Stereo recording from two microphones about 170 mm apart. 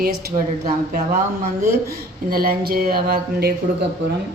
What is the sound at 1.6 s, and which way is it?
Speech, 65° right (ahead or behind).